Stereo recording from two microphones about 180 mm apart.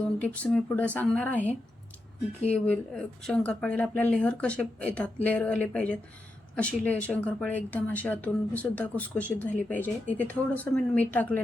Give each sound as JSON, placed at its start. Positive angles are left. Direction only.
{"t": 0.2, "sound": "speech", "side_deg": 5}